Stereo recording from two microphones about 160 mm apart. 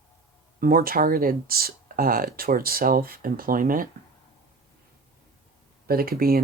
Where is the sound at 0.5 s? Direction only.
65° right (ahead or behind).